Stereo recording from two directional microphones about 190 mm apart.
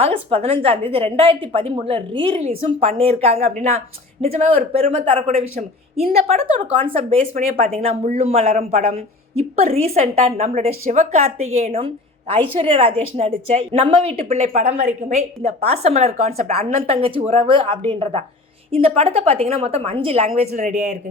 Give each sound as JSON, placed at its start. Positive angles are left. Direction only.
{"t": 0.0, "sound": "a woman's voice", "side_deg": -30}